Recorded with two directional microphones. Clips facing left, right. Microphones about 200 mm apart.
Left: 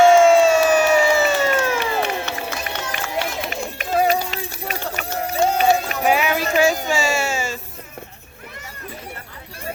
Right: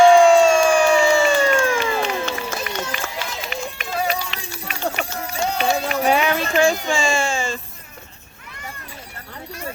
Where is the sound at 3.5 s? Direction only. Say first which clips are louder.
Left 4 dB; 45° left (ahead or behind).